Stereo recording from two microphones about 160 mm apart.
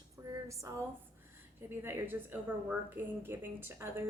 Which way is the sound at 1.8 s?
15° right (ahead or behind).